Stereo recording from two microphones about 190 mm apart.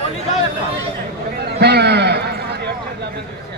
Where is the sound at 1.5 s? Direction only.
60° right (ahead or behind).